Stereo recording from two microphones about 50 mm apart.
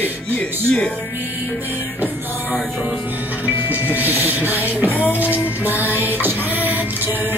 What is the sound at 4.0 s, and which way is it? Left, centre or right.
Music, right.